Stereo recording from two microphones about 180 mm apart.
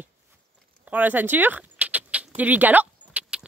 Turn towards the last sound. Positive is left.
turn(degrees=-10)  # may be behind; listen again after turning